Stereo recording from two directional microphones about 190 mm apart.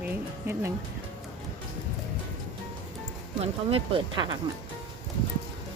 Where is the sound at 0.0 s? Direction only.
10° right (ahead or behind).